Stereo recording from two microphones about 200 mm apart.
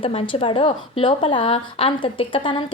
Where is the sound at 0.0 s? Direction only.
30° left (ahead or behind).